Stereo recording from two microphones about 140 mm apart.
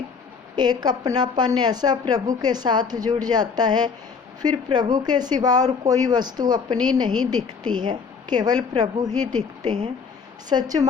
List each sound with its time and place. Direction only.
0.5 s speech: 30° right (ahead or behind)